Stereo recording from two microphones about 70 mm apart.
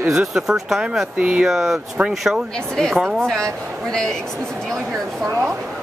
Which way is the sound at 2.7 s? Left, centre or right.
Centre.